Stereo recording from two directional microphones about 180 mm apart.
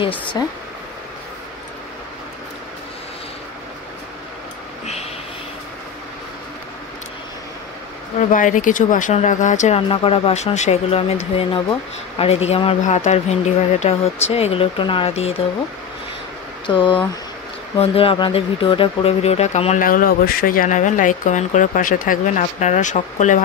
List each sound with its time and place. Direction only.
0.4 s speech: 20° left (ahead or behind)
8.2 s speech: 45° left (ahead or behind)
16.6 s speech: 25° left (ahead or behind); by 23.4 s 40° left (ahead or behind)